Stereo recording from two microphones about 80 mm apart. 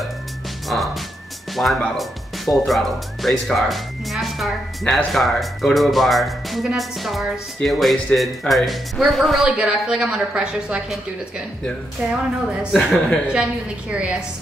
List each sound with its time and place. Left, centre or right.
0.7 s speech: centre
9.6 s speech: centre
12.7 s speech: centre
13.3 s speech: centre